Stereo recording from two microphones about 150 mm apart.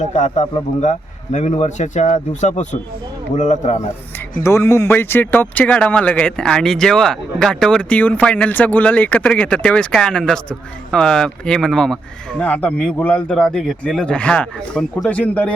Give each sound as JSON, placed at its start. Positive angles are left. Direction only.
{"t": 0.1, "sound": "speech", "side_deg": 55}
{"t": 4.4, "sound": "speech", "side_deg": 15}